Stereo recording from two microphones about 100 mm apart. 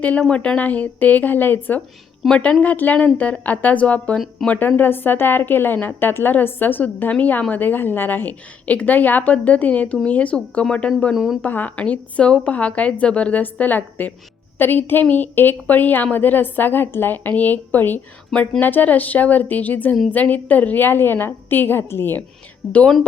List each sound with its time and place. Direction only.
0.0 s a woman's voice: 10° left (ahead or behind)
11.1 s a woman's voice: centre (ahead or behind)
11.4 s a woman's voice: 15° left (ahead or behind)
18.3 s a woman's voice: 5° left (ahead or behind)
18.6 s a woman's voice: 15° left (ahead or behind)
22.7 s a woman's voice: 10° left (ahead or behind)